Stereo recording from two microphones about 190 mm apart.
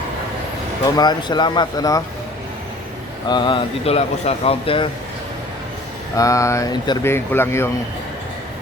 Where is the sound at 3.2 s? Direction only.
25° left (ahead or behind).